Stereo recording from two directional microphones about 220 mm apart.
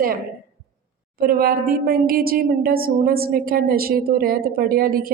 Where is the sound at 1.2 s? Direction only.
40° right (ahead or behind).